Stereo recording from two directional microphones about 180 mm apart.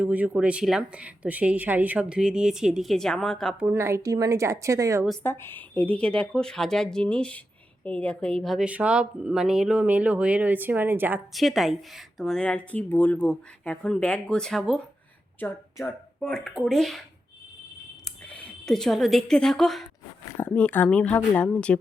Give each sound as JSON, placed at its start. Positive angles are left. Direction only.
{"t": 0.0, "sound": "a woman's voice", "side_deg": -10}
{"t": 3.7, "sound": "a woman's voice", "side_deg": -15}
{"t": 5.2, "sound": "a woman's voice", "side_deg": 15}
{"t": 11.3, "sound": "a woman's voice", "side_deg": 0}
{"t": 18.0, "sound": "speech", "side_deg": 5}